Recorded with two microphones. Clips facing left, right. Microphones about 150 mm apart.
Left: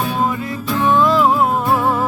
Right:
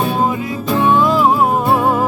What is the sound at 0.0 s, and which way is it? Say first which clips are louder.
Music: right 3 dB; 25° right (ahead or behind).